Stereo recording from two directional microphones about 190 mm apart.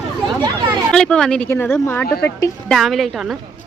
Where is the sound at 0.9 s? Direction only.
5° left (ahead or behind).